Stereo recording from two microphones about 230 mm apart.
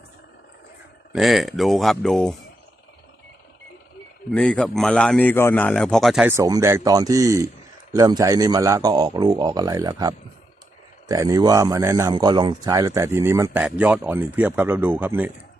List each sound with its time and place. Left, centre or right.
1.1 s a man's voice: centre
4.3 s a man's voice: centre